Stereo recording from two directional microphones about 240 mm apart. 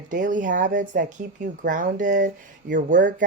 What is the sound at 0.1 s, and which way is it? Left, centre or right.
Speech, right.